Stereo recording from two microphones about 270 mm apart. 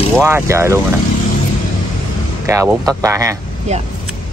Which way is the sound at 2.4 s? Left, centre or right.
Centre.